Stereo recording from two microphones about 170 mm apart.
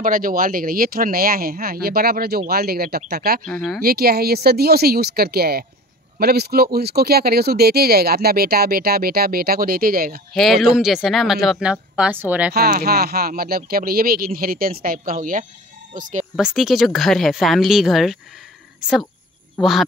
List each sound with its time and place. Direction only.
0.0 s speech: 55° right (ahead or behind)
3.4 s speech: centre (ahead or behind)
3.8 s speech: 65° right (ahead or behind)
10.3 s speech: centre (ahead or behind)
12.5 s speech: 65° right (ahead or behind); by 16.3 s 50° right (ahead or behind)
16.3 s speech: centre (ahead or behind)